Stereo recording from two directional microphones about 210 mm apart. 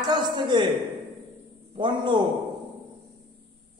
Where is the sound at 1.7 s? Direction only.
20° right (ahead or behind).